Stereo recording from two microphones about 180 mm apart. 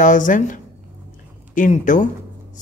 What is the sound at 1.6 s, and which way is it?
Speech, 45° left (ahead or behind).